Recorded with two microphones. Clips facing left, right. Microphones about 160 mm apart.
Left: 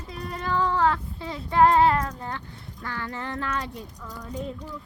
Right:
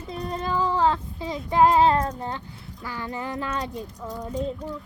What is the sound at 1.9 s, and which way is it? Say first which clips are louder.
Speech: right 3 dB; 30° right (ahead or behind).